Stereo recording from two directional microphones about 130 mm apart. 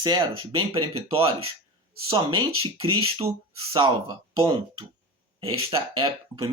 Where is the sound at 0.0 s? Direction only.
40° right (ahead or behind).